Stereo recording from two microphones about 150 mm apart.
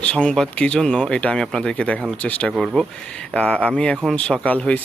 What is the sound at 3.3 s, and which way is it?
Speech, 10° left (ahead or behind).